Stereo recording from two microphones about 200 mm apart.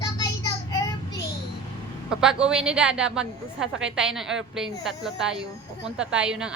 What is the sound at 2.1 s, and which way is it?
A woman's voice, 5° right (ahead or behind).